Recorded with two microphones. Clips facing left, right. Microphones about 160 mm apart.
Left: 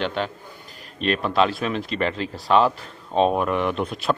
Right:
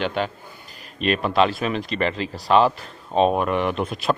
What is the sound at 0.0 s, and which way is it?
Speech, 5° right (ahead or behind).